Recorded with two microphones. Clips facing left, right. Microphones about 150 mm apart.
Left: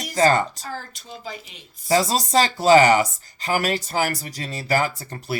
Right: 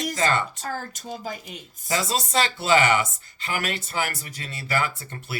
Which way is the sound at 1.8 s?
40° left (ahead or behind).